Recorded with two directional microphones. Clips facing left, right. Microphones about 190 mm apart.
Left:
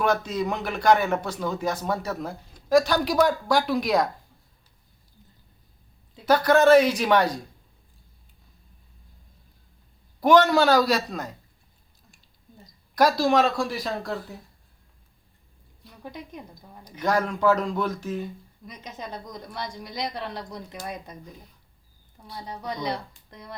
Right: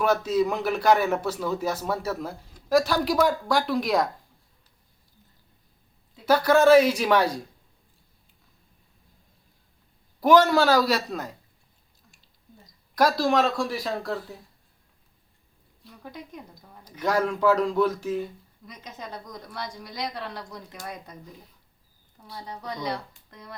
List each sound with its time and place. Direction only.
0.0 s a man's voice: 5° right (ahead or behind)
6.2 s a man's voice: 5° right (ahead or behind)
10.2 s a man's voice: 5° right (ahead or behind)
13.0 s a man's voice: centre (ahead or behind)
17.0 s a man's voice: 5° right (ahead or behind)
18.6 s a woman's voice: 20° left (ahead or behind)
23.3 s a woman's voice: 25° left (ahead or behind)